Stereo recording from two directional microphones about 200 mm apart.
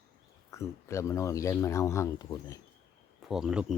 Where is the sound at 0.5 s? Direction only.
15° left (ahead or behind).